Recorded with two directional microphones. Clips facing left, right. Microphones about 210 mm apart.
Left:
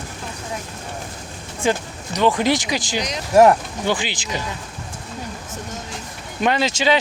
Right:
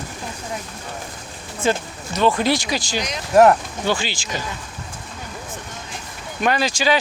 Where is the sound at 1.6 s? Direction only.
15° left (ahead or behind).